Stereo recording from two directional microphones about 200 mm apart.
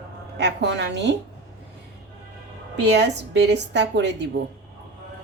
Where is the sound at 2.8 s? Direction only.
60° right (ahead or behind).